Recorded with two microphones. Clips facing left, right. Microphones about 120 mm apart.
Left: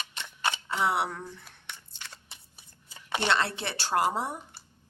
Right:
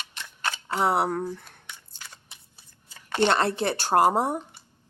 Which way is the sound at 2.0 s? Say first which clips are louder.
Even; 45° right (ahead or behind).